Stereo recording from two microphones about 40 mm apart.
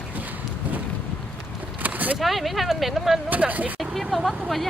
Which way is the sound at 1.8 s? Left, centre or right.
Right.